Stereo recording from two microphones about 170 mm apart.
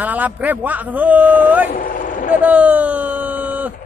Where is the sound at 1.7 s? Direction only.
50° left (ahead or behind).